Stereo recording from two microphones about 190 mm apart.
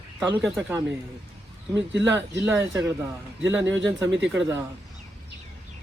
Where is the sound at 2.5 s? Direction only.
15° right (ahead or behind).